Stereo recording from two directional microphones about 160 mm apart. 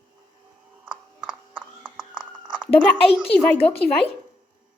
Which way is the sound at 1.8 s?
30° right (ahead or behind).